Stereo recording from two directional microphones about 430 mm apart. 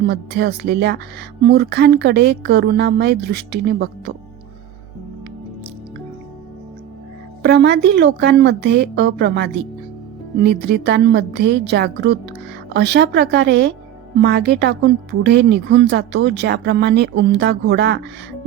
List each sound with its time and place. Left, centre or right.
0.1 s speech: right
7.4 s speech: right